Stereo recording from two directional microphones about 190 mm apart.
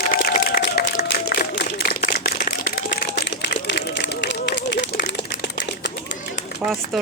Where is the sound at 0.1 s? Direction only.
55° left (ahead or behind); by 5.9 s 70° left (ahead or behind).